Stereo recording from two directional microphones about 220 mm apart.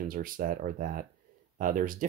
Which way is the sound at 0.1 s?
40° right (ahead or behind).